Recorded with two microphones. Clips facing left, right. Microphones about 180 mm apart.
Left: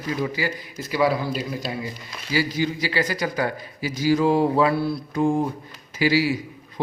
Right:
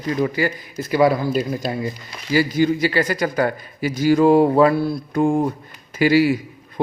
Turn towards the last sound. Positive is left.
turn(degrees=-55)  # may be behind; listen again after turning